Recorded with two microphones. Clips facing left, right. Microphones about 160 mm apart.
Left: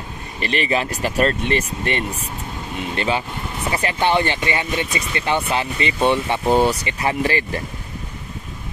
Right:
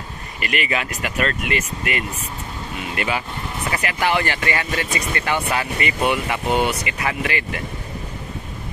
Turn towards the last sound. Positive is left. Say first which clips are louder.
# left 4 dB
turn(degrees=35)  # may be behind; listen again after turning